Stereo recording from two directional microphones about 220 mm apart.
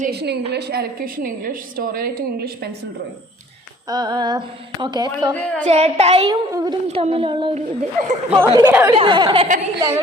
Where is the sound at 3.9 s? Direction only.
20° right (ahead or behind).